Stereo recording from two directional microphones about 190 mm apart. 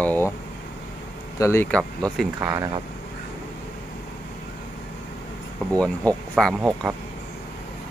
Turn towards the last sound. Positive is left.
turn(degrees=0)  # may be behind; listen again after turning